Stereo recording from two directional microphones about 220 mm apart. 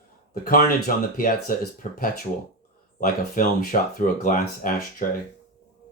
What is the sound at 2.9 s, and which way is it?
Speech, 40° left (ahead or behind).